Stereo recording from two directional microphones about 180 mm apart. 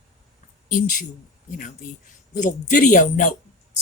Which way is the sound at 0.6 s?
45° left (ahead or behind).